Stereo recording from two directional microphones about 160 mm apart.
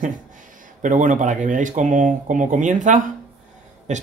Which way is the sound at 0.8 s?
50° right (ahead or behind).